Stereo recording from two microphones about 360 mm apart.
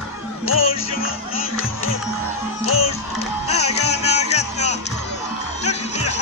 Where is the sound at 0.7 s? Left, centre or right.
Centre.